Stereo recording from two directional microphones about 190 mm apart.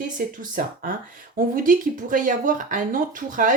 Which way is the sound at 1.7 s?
45° right (ahead or behind).